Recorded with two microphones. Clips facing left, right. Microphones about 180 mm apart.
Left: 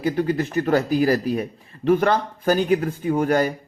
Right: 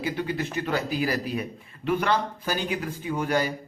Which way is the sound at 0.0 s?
45° left (ahead or behind).